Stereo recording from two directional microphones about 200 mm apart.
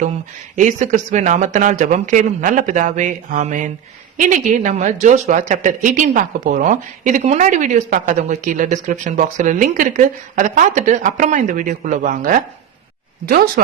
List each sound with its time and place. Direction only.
0.5 s speech: 40° right (ahead or behind)